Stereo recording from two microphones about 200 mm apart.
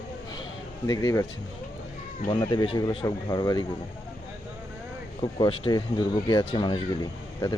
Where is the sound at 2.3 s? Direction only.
20° left (ahead or behind).